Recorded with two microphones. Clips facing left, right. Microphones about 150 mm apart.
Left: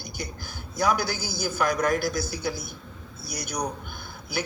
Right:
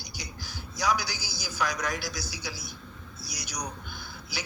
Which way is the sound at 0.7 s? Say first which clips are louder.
Left 4 dB; 55° left (ahead or behind).